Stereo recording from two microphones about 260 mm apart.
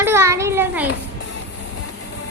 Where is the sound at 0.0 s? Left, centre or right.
Centre.